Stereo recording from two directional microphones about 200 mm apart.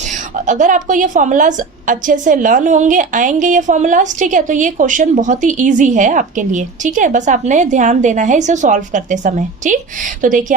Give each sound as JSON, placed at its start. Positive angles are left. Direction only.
{"t": 0.4, "sound": "a woman's voice", "side_deg": -40}